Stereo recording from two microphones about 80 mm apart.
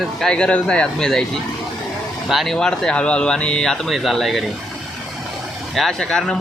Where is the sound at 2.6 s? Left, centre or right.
Centre.